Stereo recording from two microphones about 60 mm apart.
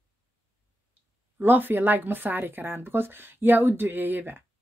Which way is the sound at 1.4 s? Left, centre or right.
Right.